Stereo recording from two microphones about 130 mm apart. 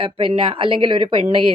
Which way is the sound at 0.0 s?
45° right (ahead or behind).